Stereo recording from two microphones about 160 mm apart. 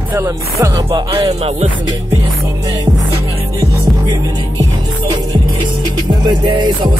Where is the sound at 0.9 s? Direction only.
35° right (ahead or behind).